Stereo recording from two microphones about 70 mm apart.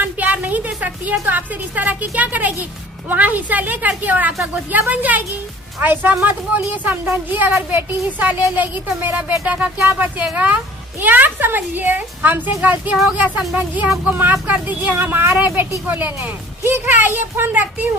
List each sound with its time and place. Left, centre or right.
0.0 s speech: right